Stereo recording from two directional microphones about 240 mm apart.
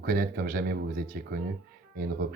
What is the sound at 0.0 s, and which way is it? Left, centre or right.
Speech, right.